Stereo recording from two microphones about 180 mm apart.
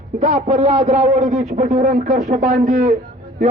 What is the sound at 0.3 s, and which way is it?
A man's voice, 40° right (ahead or behind).